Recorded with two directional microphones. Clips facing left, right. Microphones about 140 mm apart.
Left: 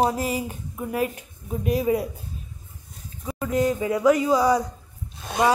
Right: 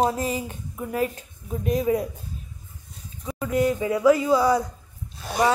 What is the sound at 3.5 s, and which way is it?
A woman's voice, 25° left (ahead or behind).